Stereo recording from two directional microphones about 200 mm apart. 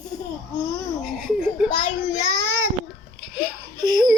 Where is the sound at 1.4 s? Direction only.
35° left (ahead or behind).